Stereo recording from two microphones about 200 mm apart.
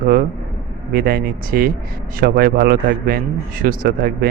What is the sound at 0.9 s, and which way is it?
Speech, 50° right (ahead or behind).